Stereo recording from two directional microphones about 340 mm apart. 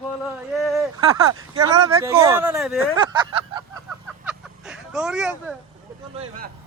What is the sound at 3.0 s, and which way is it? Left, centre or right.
Speech, centre.